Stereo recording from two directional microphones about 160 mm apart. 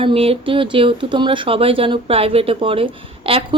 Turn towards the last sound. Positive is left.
turn(degrees=-35)  # may be behind; listen again after turning